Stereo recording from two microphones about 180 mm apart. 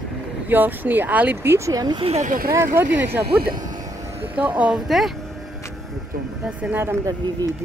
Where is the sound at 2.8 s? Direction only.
15° right (ahead or behind).